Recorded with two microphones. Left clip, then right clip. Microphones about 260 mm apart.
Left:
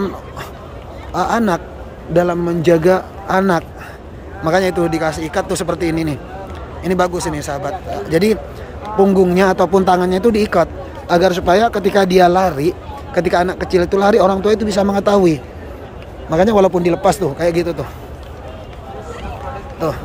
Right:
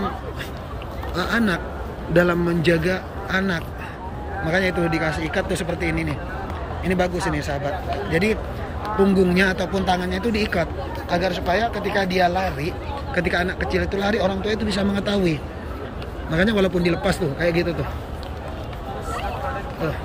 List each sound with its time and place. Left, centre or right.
1.1 s a man's voice: centre